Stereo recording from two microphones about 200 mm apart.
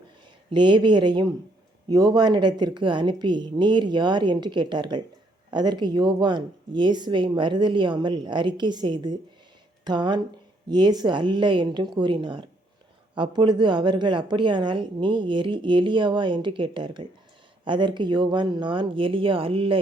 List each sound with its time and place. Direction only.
0.5 s a woman's voice: 25° right (ahead or behind)